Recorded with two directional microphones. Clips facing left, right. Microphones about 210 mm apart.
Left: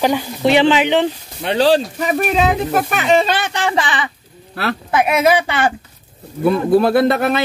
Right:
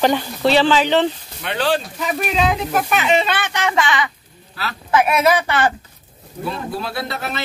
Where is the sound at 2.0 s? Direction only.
50° left (ahead or behind); by 4.1 s 30° left (ahead or behind).